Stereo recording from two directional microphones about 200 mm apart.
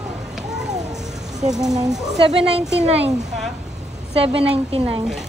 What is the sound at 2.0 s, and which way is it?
Speech, 30° right (ahead or behind).